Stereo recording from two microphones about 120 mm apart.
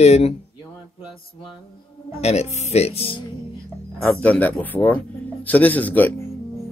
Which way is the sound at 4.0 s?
10° left (ahead or behind).